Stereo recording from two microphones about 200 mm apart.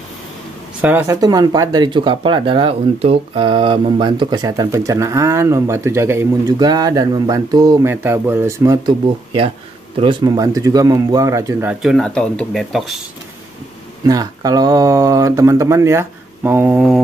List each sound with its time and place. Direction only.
0.7 s speech: 10° right (ahead or behind)
11.8 s speech: centre (ahead or behind)
14.0 s speech: 20° right (ahead or behind)